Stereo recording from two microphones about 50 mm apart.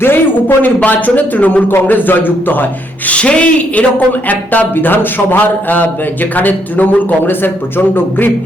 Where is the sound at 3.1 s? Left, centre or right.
Left.